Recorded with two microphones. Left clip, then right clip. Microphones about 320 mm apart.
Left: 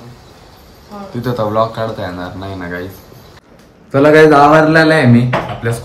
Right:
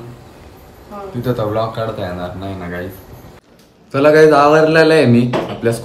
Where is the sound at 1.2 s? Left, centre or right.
Centre.